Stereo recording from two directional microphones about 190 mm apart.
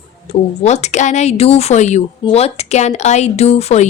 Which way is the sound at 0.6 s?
35° left (ahead or behind).